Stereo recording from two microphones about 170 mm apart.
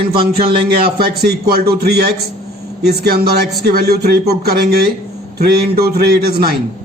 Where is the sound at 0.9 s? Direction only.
70° right (ahead or behind).